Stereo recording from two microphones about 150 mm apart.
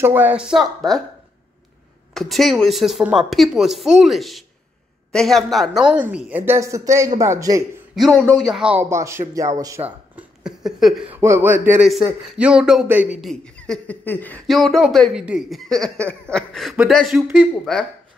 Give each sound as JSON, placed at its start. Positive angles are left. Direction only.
{"t": 0.0, "sound": "a woman's voice", "side_deg": -10}
{"t": 2.1, "sound": "a woman's voice", "side_deg": 0}
{"t": 7.9, "sound": "a woman's voice", "side_deg": 0}
{"t": 8.9, "sound": "speech", "side_deg": -20}
{"t": 11.1, "sound": "a woman's voice", "side_deg": -15}
{"t": 13.2, "sound": "speech", "side_deg": 5}
{"t": 14.5, "sound": "a woman's voice", "side_deg": 0}